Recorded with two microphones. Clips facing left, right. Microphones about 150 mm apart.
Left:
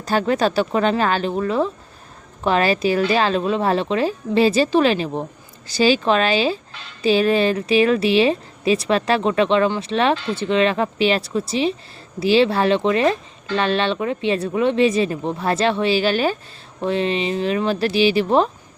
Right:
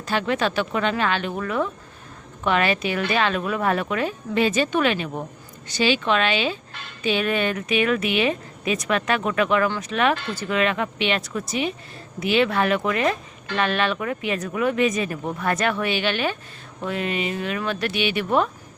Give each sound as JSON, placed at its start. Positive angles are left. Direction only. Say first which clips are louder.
{"t": 0.0, "sound": "speech", "louder": "left 4 dB", "side_deg": 40}